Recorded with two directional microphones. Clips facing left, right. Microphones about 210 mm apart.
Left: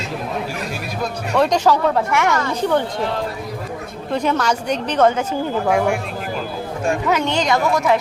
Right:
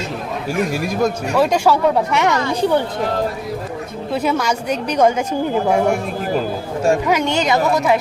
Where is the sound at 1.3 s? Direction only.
5° right (ahead or behind).